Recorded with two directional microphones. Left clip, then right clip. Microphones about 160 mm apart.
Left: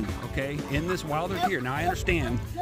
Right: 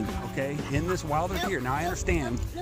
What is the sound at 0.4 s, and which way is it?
Speech, 30° left (ahead or behind).